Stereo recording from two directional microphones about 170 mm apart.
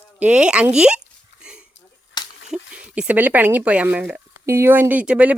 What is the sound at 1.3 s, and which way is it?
Dog, 90° left.